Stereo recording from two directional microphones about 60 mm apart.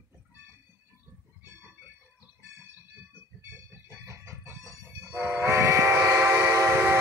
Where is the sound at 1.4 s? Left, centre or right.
Right.